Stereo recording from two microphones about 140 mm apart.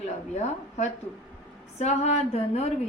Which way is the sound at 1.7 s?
50° left (ahead or behind).